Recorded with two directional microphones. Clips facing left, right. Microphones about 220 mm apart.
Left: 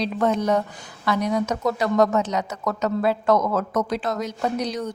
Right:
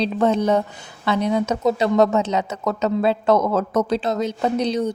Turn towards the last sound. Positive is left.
turn(degrees=-25)  # may be behind; listen again after turning